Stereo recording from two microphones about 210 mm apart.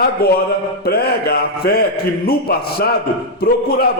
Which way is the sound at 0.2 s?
45° left (ahead or behind).